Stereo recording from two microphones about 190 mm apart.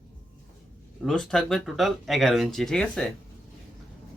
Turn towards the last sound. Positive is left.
turn(degrees=5)  # may be behind; listen again after turning